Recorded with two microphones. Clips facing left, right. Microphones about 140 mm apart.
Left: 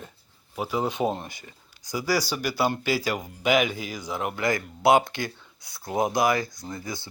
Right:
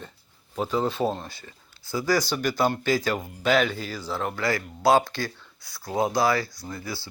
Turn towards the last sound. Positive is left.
turn(degrees=20)  # may be behind; listen again after turning